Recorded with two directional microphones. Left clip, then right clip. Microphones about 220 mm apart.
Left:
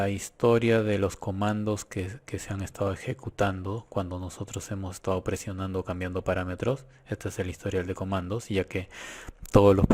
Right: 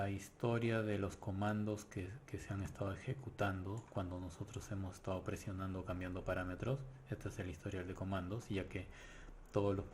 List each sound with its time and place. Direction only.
0.0 s speech: 40° left (ahead or behind)